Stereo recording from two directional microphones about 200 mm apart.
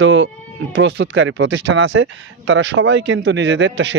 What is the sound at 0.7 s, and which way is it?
Speech, 60° right (ahead or behind).